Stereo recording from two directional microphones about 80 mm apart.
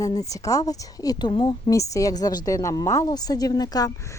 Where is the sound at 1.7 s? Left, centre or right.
Left.